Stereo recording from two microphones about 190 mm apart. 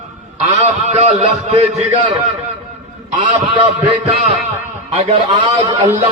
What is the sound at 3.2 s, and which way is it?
Speech, 30° right (ahead or behind).